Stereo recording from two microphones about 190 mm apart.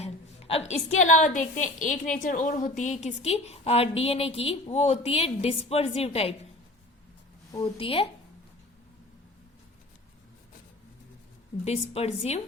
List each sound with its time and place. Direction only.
0.0 s a woman's voice: 30° left (ahead or behind)
7.8 s speech: 30° left (ahead or behind)
11.6 s a woman's voice: 35° left (ahead or behind)